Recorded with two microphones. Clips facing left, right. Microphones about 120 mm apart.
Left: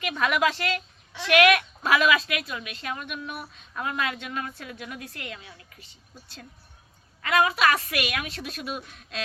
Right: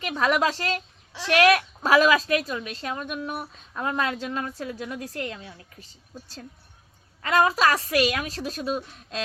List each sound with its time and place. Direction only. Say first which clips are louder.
0.0 s speech: right 1 dB; 30° right (ahead or behind)